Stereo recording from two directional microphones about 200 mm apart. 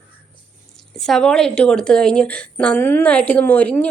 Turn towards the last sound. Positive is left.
turn(degrees=10)  # may be behind; listen again after turning